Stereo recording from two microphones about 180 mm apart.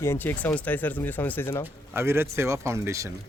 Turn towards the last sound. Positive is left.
turn(degrees=-15)  # may be behind; listen again after turning